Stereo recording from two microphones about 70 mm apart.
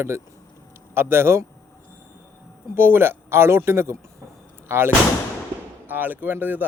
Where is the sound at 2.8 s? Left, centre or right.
Right.